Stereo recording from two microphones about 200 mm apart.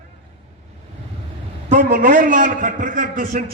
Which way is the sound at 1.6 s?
40° right (ahead or behind).